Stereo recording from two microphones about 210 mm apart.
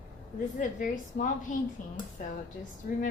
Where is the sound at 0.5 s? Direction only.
40° left (ahead or behind).